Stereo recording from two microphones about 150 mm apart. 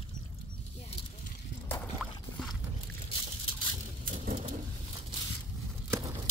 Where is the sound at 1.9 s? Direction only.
Centre (ahead or behind).